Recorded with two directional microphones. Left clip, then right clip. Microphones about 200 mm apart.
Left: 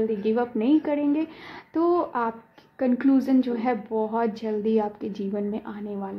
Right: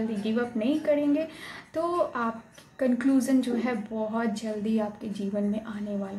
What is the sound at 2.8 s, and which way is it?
A woman's voice, 45° left (ahead or behind).